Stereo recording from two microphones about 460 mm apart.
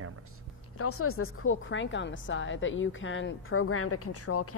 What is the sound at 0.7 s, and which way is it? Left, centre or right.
A woman's voice, left.